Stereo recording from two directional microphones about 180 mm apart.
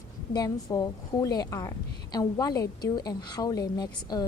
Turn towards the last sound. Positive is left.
turn(degrees=20)  # may be behind; listen again after turning